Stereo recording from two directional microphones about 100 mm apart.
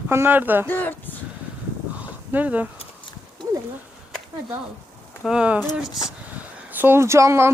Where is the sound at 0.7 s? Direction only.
20° left (ahead or behind).